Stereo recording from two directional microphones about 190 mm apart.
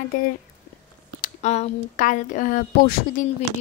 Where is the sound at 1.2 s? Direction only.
35° left (ahead or behind).